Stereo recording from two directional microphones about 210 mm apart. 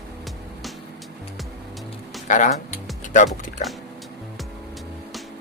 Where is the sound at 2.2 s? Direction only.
35° left (ahead or behind).